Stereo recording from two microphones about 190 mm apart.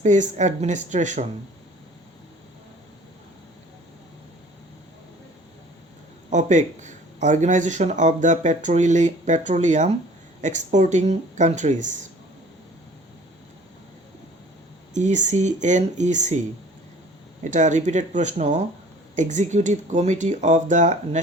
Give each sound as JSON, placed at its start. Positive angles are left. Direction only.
{"t": 0.0, "sound": "speech", "side_deg": -40}
{"t": 6.3, "sound": "speech", "side_deg": -40}
{"t": 14.9, "sound": "speech", "side_deg": -40}
{"t": 17.4, "sound": "speech", "side_deg": -40}